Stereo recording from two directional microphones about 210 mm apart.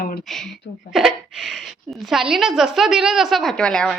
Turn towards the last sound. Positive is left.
turn(degrees=5)  # may be behind; listen again after turning